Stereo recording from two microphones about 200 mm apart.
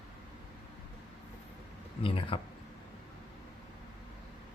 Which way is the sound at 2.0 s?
25° left (ahead or behind).